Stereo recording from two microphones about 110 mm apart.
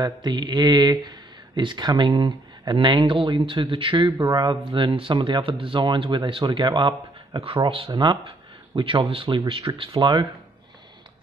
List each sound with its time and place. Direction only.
0.0 s speech: 40° right (ahead or behind)